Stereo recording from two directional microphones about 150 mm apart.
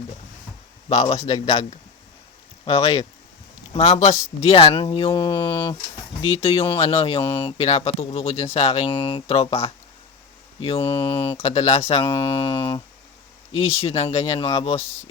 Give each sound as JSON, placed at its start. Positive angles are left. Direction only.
{"t": 0.9, "sound": "speech", "side_deg": 50}
{"t": 2.6, "sound": "speech", "side_deg": 45}